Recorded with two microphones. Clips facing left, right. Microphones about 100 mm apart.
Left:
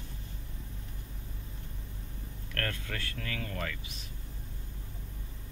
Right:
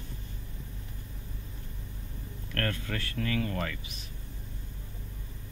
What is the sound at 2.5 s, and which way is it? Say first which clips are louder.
Speech: right 4 dB; 40° right (ahead or behind).